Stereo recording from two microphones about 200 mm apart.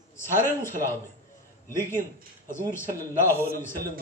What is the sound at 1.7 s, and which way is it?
Speech, 10° left (ahead or behind).